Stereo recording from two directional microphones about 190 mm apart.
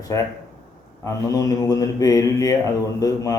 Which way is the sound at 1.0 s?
15° left (ahead or behind).